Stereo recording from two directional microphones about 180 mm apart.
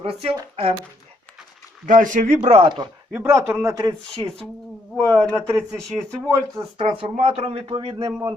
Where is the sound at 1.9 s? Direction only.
45° right (ahead or behind).